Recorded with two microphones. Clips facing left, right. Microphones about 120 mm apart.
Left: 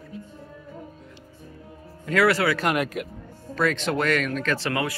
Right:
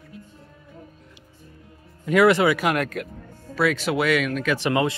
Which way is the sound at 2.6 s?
Centre (ahead or behind).